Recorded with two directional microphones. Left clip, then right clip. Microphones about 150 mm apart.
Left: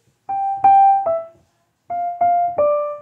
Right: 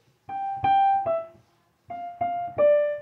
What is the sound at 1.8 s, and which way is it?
Music, 25° left (ahead or behind).